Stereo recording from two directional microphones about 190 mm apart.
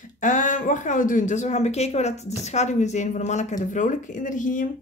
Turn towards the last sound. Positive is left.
turn(degrees=40)  # may be behind; listen again after turning